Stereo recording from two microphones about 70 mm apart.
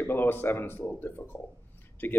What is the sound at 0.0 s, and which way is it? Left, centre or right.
A man's voice, left.